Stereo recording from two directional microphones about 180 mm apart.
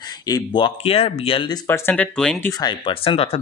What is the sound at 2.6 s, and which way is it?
Speech, 25° left (ahead or behind).